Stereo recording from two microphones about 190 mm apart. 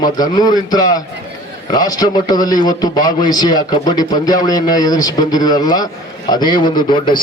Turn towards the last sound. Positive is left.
turn(degrees=25)  # may be behind; listen again after turning